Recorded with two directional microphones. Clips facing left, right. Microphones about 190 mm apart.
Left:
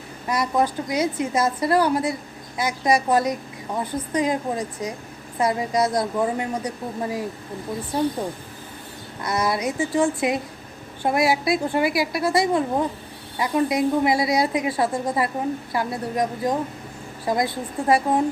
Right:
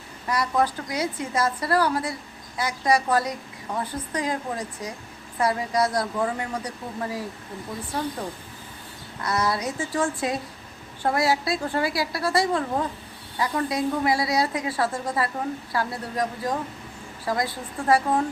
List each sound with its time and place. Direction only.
0.3 s a woman's voice: 20° left (ahead or behind)
9.2 s a woman's voice: 15° left (ahead or behind)